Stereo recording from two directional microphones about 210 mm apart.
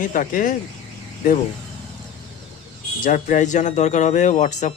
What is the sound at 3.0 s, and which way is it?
Speech, 35° left (ahead or behind).